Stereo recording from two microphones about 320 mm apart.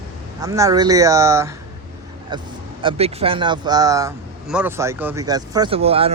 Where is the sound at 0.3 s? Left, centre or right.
Centre.